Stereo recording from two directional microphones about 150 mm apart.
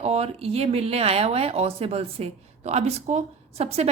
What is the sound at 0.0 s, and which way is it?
Speech, 45° right (ahead or behind).